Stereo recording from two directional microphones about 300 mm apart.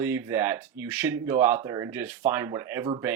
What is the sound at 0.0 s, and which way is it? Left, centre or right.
Speech, centre.